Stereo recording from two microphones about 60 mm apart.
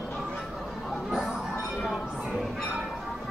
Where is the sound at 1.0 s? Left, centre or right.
Centre.